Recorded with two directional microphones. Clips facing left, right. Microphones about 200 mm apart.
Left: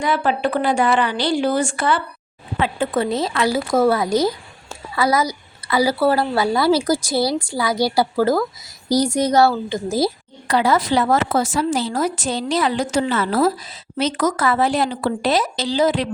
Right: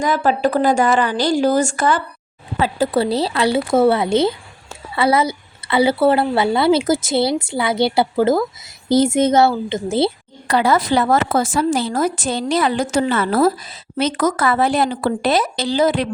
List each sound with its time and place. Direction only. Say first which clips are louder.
0.0 s a woman's voice: right 3 dB; 40° right (ahead or behind); by 10.1 s 25° right (ahead or behind)
10.5 s a woman's voice: right 1 dB; 55° right (ahead or behind)